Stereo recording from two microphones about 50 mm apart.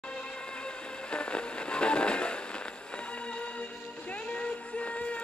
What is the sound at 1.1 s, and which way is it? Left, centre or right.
Fireworks, left.